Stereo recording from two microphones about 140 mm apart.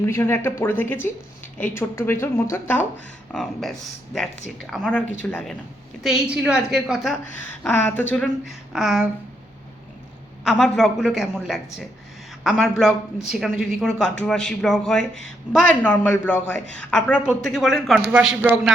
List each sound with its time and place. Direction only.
0.0 s speech: 20° left (ahead or behind)
3.3 s speech: centre (ahead or behind)
6.0 s speech: 5° right (ahead or behind)
7.7 s speech: 15° left (ahead or behind)
8.7 s speech: 5° right (ahead or behind)
10.4 s speech: centre (ahead or behind)
13.5 s a woman's voice: 90° right
13.7 s speech: centre (ahead or behind)